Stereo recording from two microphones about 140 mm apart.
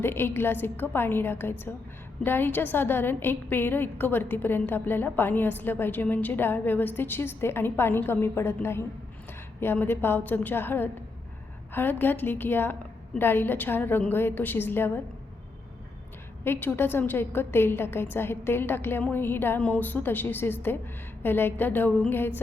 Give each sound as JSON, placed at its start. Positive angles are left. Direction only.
{"t": 0.0, "sound": "a woman's voice", "side_deg": 15}
{"t": 16.4, "sound": "a woman's voice", "side_deg": 15}